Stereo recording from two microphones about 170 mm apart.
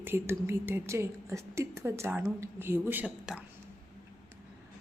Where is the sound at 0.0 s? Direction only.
15° right (ahead or behind).